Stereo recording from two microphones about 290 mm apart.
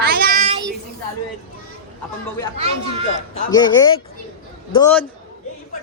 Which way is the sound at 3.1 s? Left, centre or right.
Centre.